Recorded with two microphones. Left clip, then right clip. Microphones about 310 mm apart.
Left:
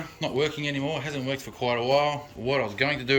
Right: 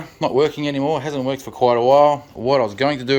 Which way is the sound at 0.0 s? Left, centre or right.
Centre.